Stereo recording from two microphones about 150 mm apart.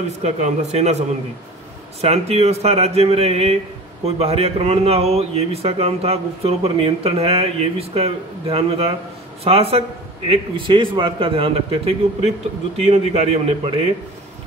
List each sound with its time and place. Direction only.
0.2 s a man's voice: 50° right (ahead or behind)